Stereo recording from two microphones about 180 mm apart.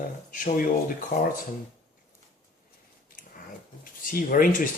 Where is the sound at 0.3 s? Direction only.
50° left (ahead or behind).